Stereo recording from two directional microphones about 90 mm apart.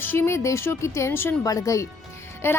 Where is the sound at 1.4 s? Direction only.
40° left (ahead or behind).